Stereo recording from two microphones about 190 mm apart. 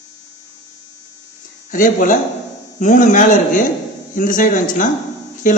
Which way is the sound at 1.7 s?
45° left (ahead or behind).